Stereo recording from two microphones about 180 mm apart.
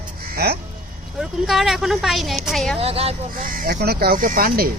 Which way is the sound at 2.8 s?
35° right (ahead or behind).